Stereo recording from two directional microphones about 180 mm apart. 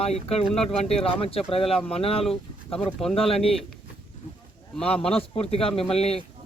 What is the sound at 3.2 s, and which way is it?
Speech, 35° left (ahead or behind).